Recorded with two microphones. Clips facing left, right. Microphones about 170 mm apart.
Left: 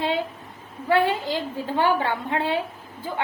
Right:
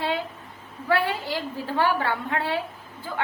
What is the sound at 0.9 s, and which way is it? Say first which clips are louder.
A woman's voice: left 3 dB; 20° left (ahead or behind).